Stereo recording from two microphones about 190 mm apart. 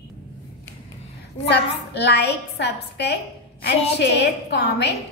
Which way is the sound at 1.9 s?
60° left (ahead or behind).